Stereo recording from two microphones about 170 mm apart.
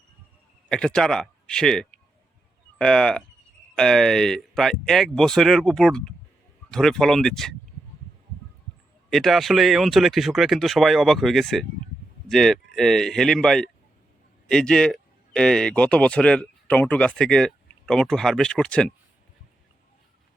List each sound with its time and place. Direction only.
0.7 s speech: 5° left (ahead or behind)
9.0 s speech: centre (ahead or behind)